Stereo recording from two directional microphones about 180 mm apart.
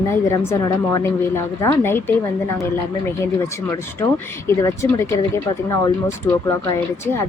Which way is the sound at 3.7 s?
15° left (ahead or behind).